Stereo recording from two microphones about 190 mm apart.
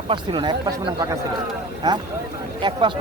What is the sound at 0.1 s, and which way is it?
Speech, 25° right (ahead or behind).